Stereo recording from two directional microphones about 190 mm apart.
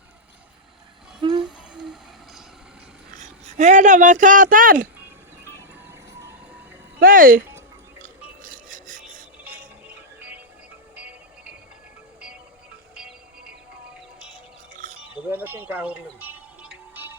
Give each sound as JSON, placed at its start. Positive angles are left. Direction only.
{"t": 1.2, "sound": "music", "side_deg": -25}
{"t": 1.5, "sound": "a sound", "side_deg": 0}
{"t": 3.2, "sound": "a sound", "side_deg": -40}
{"t": 5.9, "sound": "vehicle", "side_deg": -15}
{"t": 7.0, "sound": "speech", "side_deg": -50}
{"t": 8.4, "sound": "rub", "side_deg": -45}
{"t": 9.4, "sound": "music", "side_deg": -10}
{"t": 12.9, "sound": "music", "side_deg": -5}
{"t": 15.1, "sound": "music", "side_deg": -10}